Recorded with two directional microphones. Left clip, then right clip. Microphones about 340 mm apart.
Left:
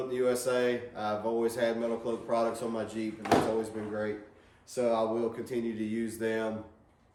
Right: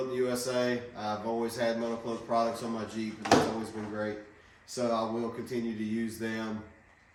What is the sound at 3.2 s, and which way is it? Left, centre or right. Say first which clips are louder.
Speech: right 2 dB; right.